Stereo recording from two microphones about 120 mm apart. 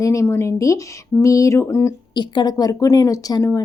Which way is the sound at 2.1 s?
40° left (ahead or behind).